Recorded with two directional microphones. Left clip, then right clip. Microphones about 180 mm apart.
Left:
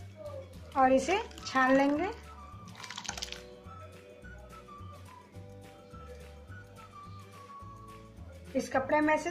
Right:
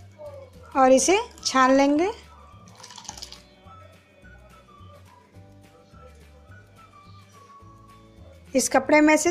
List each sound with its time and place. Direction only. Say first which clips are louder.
0.7 s a woman's voice: right 8 dB; 45° right (ahead or behind)
8.5 s a woman's voice: right 10 dB; 50° right (ahead or behind)